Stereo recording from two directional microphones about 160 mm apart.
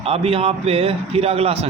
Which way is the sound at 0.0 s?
35° right (ahead or behind).